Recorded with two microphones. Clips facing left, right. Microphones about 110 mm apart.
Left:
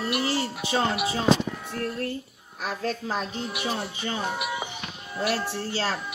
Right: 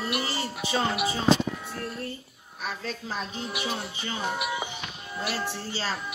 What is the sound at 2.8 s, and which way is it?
Speech, 45° left (ahead or behind).